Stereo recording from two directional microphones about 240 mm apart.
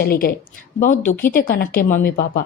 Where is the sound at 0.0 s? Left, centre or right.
Left.